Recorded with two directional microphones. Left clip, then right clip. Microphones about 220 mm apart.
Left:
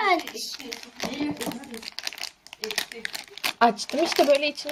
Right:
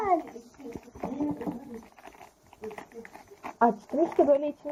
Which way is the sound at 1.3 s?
15° left (ahead or behind).